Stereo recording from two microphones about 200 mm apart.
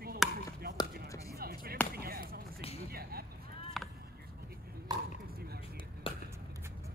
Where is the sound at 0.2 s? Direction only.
Centre (ahead or behind).